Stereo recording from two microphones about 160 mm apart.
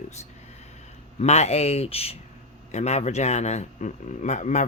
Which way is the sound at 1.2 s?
40° left (ahead or behind).